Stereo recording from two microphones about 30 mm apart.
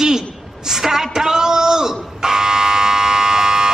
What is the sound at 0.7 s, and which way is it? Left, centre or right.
Buzzer, centre.